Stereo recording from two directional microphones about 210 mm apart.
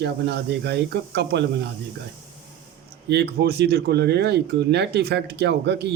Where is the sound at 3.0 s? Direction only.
50° right (ahead or behind).